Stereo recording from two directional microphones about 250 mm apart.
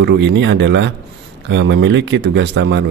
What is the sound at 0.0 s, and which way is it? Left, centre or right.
Speech, right.